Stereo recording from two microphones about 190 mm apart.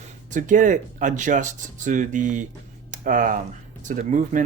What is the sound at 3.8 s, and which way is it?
Speech, 40° right (ahead or behind).